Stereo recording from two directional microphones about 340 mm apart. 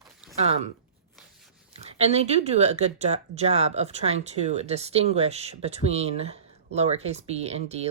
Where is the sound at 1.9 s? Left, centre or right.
Centre.